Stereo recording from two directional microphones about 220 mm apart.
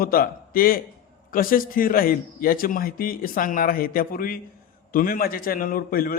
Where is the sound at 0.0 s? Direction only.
40° left (ahead or behind).